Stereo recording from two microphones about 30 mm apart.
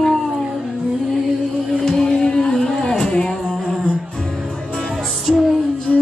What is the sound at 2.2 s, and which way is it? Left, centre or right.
Music, left.